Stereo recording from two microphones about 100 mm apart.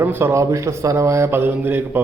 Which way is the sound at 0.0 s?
25° right (ahead or behind).